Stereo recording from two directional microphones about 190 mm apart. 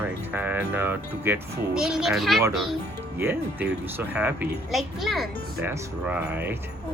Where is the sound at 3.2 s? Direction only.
10° right (ahead or behind).